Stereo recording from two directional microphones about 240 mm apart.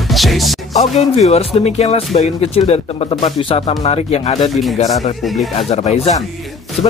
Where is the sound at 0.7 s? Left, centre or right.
Left.